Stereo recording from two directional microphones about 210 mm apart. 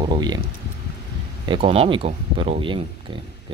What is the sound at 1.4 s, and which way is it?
Speech, 25° right (ahead or behind).